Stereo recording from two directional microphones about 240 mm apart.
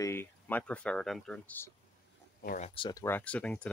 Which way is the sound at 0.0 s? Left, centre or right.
Centre.